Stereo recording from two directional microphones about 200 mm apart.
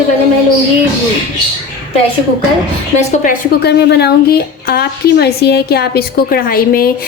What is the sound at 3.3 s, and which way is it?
A woman's voice, 55° left (ahead or behind).